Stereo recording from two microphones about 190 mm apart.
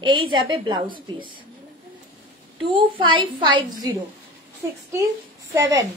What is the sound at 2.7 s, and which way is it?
Speech, 25° right (ahead or behind).